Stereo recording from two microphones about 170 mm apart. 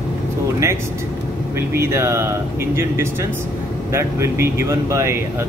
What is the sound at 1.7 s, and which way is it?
Speech, 15° right (ahead or behind).